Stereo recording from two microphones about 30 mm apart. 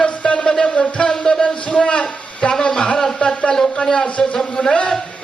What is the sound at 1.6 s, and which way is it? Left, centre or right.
Speech, left.